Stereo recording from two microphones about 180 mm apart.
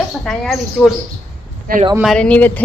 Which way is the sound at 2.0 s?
5° left (ahead or behind).